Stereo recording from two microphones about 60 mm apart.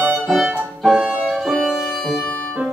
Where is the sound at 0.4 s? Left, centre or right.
Right.